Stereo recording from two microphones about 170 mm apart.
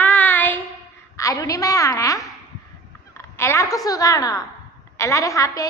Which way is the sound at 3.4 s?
15° left (ahead or behind).